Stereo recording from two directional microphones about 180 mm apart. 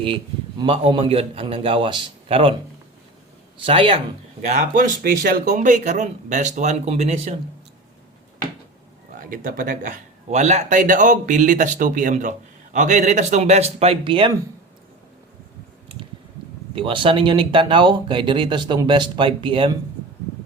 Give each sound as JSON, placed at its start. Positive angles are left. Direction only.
{"t": 0.6, "sound": "a man's voice", "side_deg": -30}
{"t": 3.6, "sound": "speech", "side_deg": -30}
{"t": 4.4, "sound": "speech", "side_deg": -45}
{"t": 9.1, "sound": "a man's voice", "side_deg": -50}
{"t": 16.7, "sound": "speech", "side_deg": -30}